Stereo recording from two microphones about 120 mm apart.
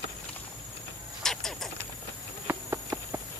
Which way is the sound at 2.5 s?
20° right (ahead or behind).